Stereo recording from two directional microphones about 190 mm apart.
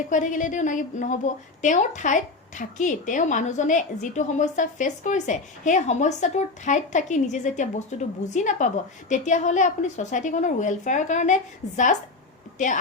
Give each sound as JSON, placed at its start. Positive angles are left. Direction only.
{"t": 0.1, "sound": "a woman's voice", "side_deg": 40}